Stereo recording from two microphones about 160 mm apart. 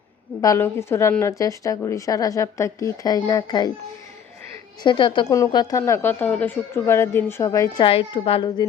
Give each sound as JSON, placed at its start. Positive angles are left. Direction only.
{"t": 0.4, "sound": "a woman's voice", "side_deg": 15}
{"t": 4.8, "sound": "a woman's voice", "side_deg": 30}
{"t": 7.9, "sound": "a woman's voice", "side_deg": 35}